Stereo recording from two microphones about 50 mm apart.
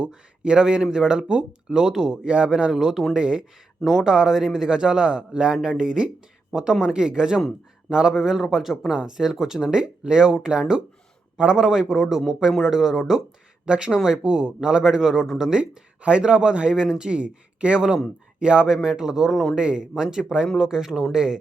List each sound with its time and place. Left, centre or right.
0.1 s speech: centre
2.2 s a man's voice: right
2.7 s speech: centre
3.2 s speech: centre
13.7 s a man's voice: centre
17.7 s speech: centre
19.5 s speech: centre